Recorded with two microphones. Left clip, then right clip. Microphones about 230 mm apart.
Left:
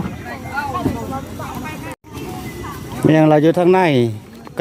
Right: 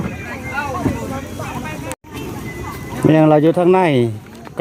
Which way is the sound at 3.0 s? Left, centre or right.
Centre.